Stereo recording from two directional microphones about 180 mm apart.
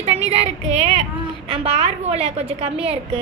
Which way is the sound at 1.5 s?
35° right (ahead or behind).